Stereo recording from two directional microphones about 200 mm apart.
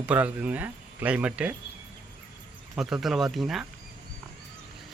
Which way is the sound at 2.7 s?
Centre (ahead or behind).